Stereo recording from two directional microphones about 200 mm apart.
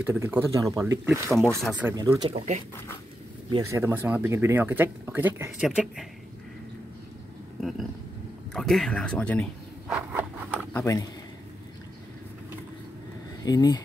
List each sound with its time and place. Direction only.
0.0 s speech: 10° right (ahead or behind)
1.6 s speech: centre (ahead or behind)
1.9 s speech: 10° right (ahead or behind)
2.2 s speech: 35° right (ahead or behind)
3.4 s speech: 15° right (ahead or behind)
8.5 s speech: centre (ahead or behind)
9.8 s a sound: 5° right (ahead or behind)
10.7 s speech: 10° left (ahead or behind)
13.4 s speech: 20° left (ahead or behind)